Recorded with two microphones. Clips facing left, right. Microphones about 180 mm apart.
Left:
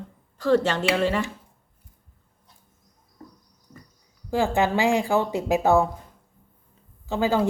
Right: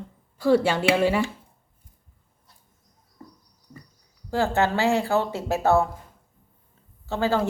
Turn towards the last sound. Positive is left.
turn(degrees=15)  # may be behind; listen again after turning